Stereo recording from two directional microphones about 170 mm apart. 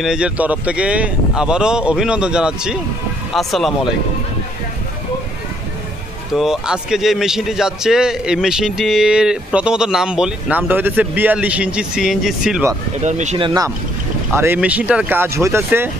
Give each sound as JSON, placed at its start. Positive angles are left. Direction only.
{"t": 0.0, "sound": "speech", "side_deg": -5}
{"t": 6.3, "sound": "speech", "side_deg": -5}
{"t": 13.0, "sound": "speech", "side_deg": -45}
{"t": 13.4, "sound": "speech", "side_deg": -20}